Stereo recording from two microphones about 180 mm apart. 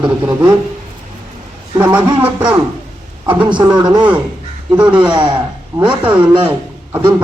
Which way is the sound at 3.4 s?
25° right (ahead or behind).